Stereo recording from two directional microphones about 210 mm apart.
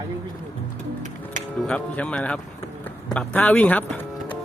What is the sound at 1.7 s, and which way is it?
Speech, 5° left (ahead or behind).